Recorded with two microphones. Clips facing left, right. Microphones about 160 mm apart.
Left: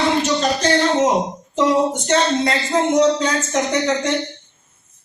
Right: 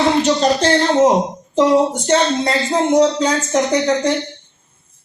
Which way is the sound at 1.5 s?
30° right (ahead or behind).